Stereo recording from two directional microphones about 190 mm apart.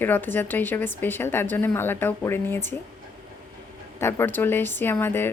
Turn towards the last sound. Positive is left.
turn(degrees=10)  # may be behind; listen again after turning